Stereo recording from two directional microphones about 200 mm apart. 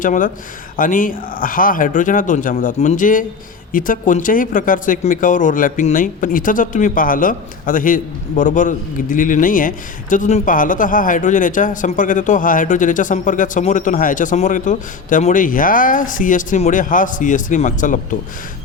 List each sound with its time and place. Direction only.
0.0 s speech: 40° left (ahead or behind)